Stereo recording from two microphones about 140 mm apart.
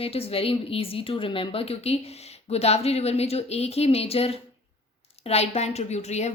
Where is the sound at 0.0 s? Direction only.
45° left (ahead or behind).